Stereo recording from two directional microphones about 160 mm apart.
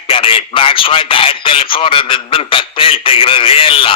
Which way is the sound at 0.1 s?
35° left (ahead or behind).